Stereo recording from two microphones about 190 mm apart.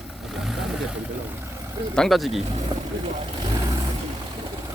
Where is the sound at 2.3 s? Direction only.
35° right (ahead or behind).